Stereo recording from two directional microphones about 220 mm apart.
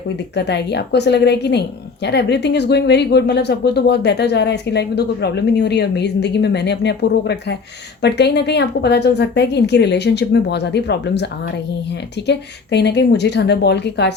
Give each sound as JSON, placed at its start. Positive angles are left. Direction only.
{"t": 0.3, "sound": "speech", "side_deg": 50}